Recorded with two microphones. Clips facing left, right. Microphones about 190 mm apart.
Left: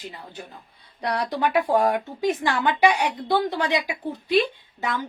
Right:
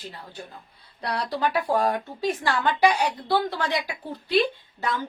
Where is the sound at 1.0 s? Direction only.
15° left (ahead or behind).